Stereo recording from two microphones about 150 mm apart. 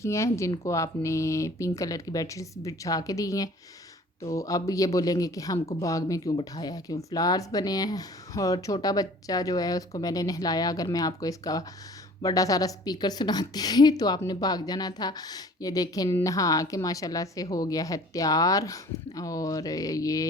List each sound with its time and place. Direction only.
0.0 s a woman's voice: 20° left (ahead or behind)